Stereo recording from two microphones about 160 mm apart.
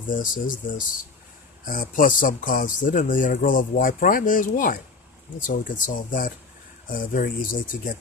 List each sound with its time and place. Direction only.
0.1 s speech: 55° left (ahead or behind)